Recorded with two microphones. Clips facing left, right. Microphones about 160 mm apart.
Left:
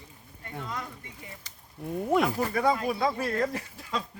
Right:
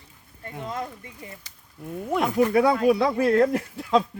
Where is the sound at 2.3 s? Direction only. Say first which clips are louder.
Right 7 dB; 70° right (ahead or behind).